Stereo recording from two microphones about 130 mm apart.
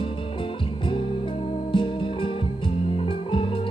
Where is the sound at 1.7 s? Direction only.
40° left (ahead or behind).